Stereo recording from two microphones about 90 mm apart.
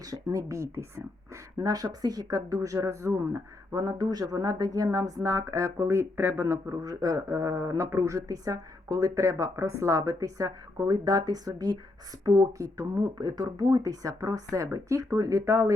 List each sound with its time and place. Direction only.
0.0 s speech: 40° right (ahead or behind)